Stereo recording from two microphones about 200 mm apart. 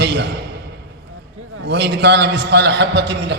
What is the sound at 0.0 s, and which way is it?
Speech, 60° right (ahead or behind).